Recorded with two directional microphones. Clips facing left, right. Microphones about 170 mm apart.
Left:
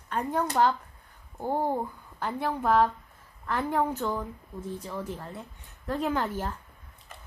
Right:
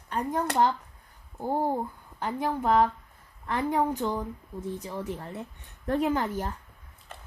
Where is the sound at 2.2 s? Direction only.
10° right (ahead or behind).